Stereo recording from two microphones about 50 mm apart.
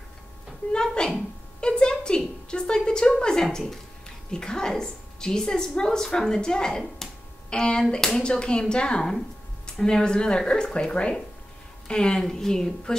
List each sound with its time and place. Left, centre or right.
0.7 s a woman's voice: centre
1.6 s a sound: centre
3.5 s a woman's voice: centre
8.2 s a woman's voice: centre